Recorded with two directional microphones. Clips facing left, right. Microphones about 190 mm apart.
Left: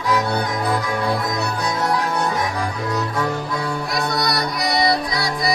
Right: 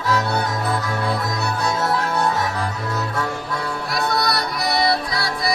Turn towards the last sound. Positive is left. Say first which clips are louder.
# left 2 dB
turn(degrees=20)  # may be behind; listen again after turning